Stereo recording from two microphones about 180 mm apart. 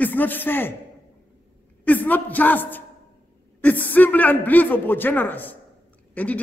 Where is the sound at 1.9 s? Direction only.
10° left (ahead or behind).